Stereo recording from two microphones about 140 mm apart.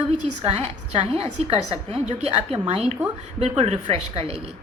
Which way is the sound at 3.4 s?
50° right (ahead or behind).